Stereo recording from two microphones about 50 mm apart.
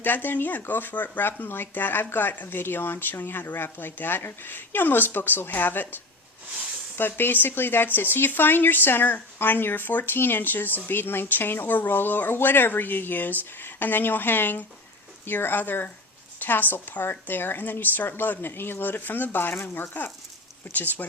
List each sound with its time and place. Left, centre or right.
0.0 s a woman's voice: left